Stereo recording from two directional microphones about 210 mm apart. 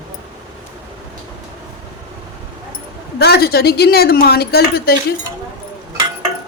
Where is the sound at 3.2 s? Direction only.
50° left (ahead or behind).